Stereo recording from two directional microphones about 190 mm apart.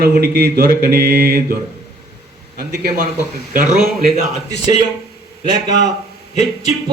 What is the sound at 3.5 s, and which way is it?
Speech, 45° right (ahead or behind).